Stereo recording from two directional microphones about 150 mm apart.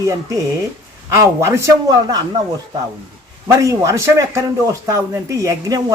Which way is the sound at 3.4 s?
20° right (ahead or behind).